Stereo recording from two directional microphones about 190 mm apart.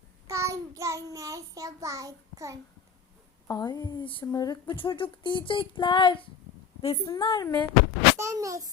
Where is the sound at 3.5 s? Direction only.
20° left (ahead or behind).